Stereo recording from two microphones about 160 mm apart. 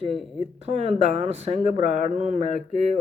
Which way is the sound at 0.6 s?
40° right (ahead or behind).